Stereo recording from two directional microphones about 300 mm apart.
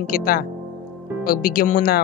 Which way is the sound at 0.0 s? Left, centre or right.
Left.